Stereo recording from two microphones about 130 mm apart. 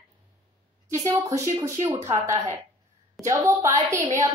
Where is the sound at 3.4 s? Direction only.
20° right (ahead or behind).